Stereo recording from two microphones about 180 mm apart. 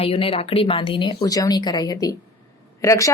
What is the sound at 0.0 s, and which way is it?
A woman's voice, 30° left (ahead or behind).